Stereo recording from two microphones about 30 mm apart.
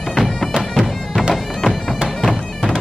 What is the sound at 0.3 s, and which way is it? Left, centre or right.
Bagpipes, centre.